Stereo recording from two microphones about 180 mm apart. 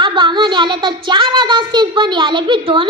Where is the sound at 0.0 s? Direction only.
25° right (ahead or behind).